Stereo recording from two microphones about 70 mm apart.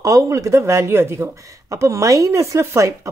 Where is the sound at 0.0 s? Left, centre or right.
Right.